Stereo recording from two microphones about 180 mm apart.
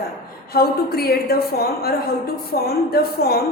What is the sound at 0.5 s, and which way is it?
A woman's voice, 60° left (ahead or behind).